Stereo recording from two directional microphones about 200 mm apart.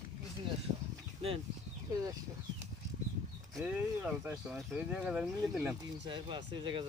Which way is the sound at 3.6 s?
10° right (ahead or behind).